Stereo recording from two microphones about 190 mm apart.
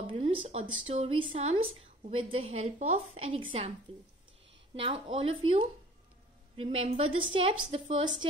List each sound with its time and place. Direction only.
0.0 s a woman's voice: 25° right (ahead or behind)
4.7 s speech: 30° right (ahead or behind)
6.5 s a woman's voice: 30° right (ahead or behind)